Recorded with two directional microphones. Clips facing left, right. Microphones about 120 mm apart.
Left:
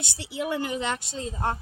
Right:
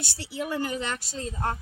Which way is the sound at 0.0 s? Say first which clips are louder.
Left 2 dB; 20° left (ahead or behind).